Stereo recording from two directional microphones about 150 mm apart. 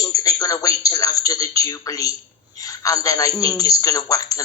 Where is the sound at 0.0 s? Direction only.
25° left (ahead or behind).